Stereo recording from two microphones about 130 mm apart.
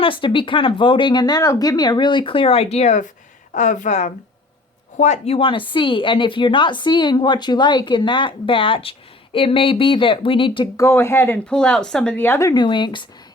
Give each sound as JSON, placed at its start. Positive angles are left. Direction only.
{"t": 0.0, "sound": "a woman's voice", "side_deg": 40}
{"t": 10.8, "sound": "speech", "side_deg": 20}
{"t": 11.4, "sound": "speech", "side_deg": 5}
{"t": 12.5, "sound": "a woman's voice", "side_deg": 35}